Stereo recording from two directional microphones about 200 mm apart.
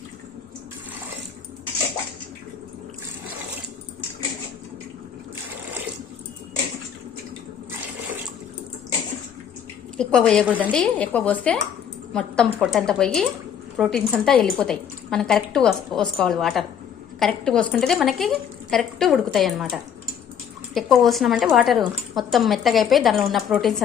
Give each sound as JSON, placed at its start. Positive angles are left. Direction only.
{"t": 10.0, "sound": "speech", "side_deg": 5}
{"t": 10.4, "sound": "a woman's voice", "side_deg": -10}
{"t": 10.7, "sound": "speech", "side_deg": 5}